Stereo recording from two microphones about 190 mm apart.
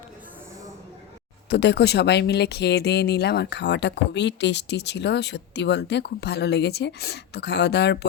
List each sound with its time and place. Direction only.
1.5 s speech: 65° left (ahead or behind)